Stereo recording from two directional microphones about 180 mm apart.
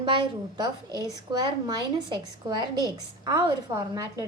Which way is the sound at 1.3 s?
20° right (ahead or behind).